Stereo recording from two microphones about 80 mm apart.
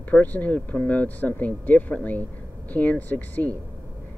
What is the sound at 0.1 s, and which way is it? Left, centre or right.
Speech, centre.